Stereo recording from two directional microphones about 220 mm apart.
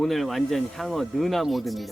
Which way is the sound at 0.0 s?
Centre (ahead or behind).